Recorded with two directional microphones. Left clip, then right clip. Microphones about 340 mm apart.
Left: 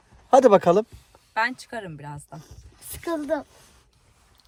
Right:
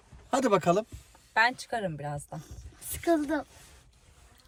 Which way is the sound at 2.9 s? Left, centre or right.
Centre.